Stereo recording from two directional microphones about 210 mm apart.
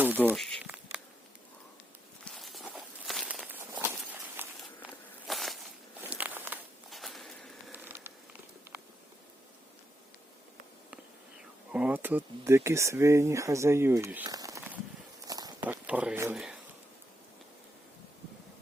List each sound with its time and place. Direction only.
0.0 s insect: 10° right (ahead or behind)
2.2 s walk: centre (ahead or behind)
5.3 s a sound: centre (ahead or behind)
6.0 s walk: 5° right (ahead or behind)
7.7 s mechanisms: 10° right (ahead or behind)
11.7 s speech: 5° right (ahead or behind)
15.3 s walk: 20° right (ahead or behind)
15.6 s speech: 5° right (ahead or behind)